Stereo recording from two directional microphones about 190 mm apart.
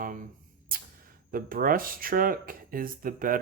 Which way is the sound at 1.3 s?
50° right (ahead or behind).